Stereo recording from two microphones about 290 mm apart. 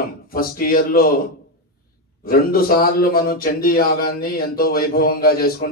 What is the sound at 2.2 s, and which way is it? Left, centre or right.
Speech, left.